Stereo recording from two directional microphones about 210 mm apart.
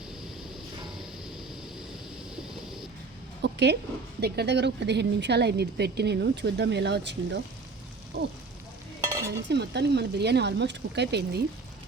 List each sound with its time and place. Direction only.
3.4 s a woman's voice: 55° right (ahead or behind)
9.0 s stir: 15° right (ahead or behind)
9.5 s a woman's voice: 55° right (ahead or behind)